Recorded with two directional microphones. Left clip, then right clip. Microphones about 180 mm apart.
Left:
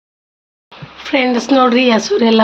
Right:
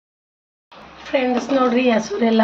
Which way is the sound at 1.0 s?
60° left (ahead or behind).